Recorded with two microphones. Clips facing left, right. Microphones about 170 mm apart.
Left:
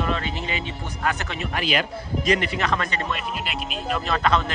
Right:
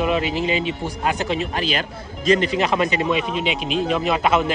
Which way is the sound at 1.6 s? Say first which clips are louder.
Right 1 dB; 30° right (ahead or behind).